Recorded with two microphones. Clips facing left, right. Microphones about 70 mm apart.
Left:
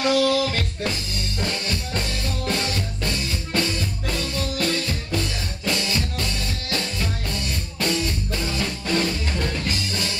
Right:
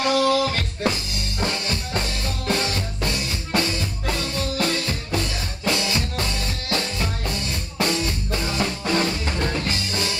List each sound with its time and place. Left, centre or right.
0.0 s music: centre